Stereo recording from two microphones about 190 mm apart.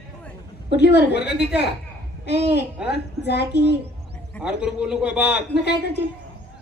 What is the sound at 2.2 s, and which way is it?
A woman's voice, 60° left (ahead or behind).